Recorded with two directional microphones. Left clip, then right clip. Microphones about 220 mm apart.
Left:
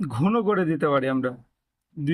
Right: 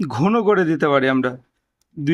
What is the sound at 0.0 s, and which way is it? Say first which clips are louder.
Speech: right 6 dB; 50° right (ahead or behind).